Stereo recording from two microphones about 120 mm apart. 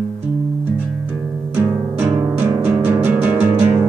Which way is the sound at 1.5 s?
20° right (ahead or behind).